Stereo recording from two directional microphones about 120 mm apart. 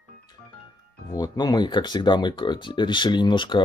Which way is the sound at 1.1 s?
35° left (ahead or behind).